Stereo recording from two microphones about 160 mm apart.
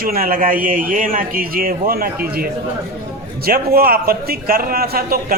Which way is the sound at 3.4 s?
70° right (ahead or behind).